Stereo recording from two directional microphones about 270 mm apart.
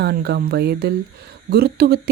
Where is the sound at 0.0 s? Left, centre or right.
Right.